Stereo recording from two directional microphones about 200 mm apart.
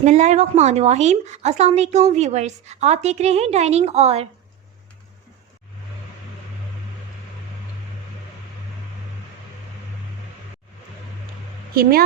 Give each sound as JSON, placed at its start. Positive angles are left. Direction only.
{"t": 0.0, "sound": "a woman's voice", "side_deg": -35}
{"t": 11.7, "sound": "a woman's voice", "side_deg": -50}